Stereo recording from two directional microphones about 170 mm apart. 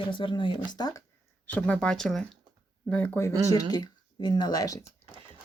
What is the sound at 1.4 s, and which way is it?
Speech, 10° left (ahead or behind).